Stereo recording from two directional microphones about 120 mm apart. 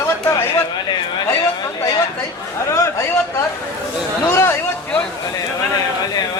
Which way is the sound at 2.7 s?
25° left (ahead or behind).